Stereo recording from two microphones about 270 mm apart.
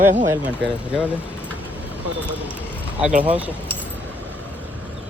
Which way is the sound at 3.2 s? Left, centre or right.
Centre.